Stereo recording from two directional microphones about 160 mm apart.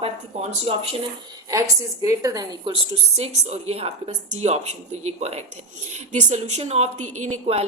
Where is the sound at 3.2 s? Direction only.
40° right (ahead or behind).